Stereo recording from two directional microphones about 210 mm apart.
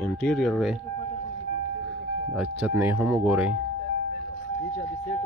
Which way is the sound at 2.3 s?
5° right (ahead or behind).